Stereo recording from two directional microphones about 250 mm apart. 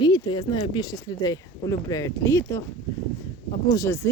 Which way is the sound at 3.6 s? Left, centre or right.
Centre.